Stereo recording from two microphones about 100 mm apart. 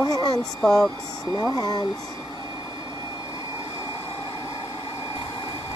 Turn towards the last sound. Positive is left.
turn(degrees=60)  # may be behind; listen again after turning